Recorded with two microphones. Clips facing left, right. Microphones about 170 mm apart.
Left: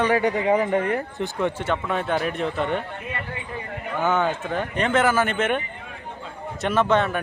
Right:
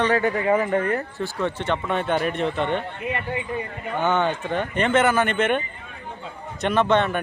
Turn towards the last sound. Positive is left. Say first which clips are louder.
# right 1 dB
turn(degrees=0)  # may be behind; listen again after turning